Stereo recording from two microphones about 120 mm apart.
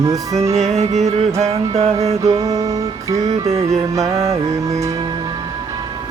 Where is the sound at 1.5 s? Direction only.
55° right (ahead or behind).